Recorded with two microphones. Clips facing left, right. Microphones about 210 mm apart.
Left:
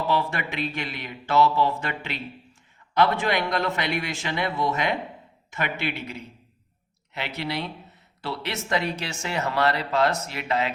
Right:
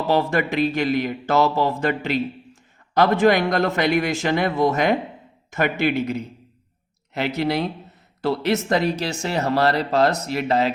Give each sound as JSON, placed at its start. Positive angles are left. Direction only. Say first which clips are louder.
{"t": 0.1, "sound": "speech", "louder": "right 10 dB", "side_deg": -40}